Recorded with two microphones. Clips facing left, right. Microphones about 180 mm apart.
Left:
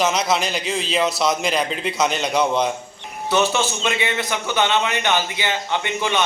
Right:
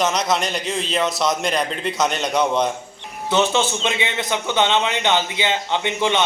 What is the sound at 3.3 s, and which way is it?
A man's voice, 20° right (ahead or behind).